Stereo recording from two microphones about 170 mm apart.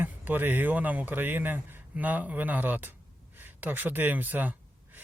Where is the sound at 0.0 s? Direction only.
10° right (ahead or behind).